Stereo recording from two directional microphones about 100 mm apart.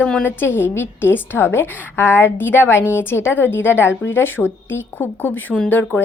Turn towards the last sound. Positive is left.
turn(degrees=15)  # may be behind; listen again after turning